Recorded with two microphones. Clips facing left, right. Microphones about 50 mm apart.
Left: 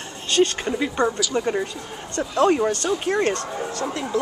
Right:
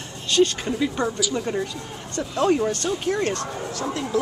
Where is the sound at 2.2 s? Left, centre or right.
Centre.